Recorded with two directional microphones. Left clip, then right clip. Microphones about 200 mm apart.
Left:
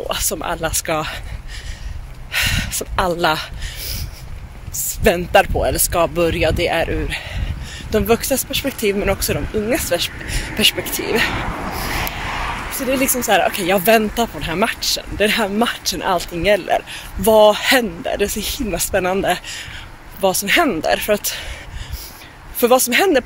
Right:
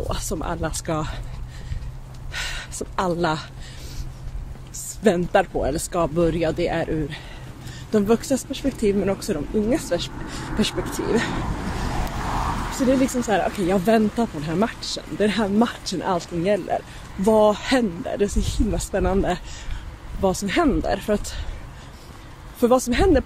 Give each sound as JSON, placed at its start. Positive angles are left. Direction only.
{"t": 0.1, "sound": "speech", "side_deg": -5}
{"t": 2.3, "sound": "speech", "side_deg": -5}
{"t": 5.0, "sound": "speech", "side_deg": -5}
{"t": 12.0, "sound": "vehicle", "side_deg": -45}
{"t": 12.8, "sound": "speech", "side_deg": -10}
{"t": 22.6, "sound": "speech", "side_deg": -5}